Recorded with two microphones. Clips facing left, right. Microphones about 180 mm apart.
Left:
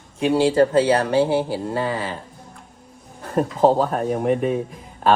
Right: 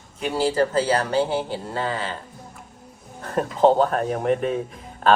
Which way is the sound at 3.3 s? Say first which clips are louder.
Left 1 dB; centre (ahead or behind).